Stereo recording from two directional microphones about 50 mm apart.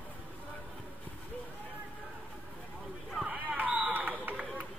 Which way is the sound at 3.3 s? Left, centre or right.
Right.